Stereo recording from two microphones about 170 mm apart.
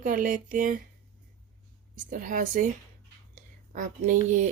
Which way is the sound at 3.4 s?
50° right (ahead or behind).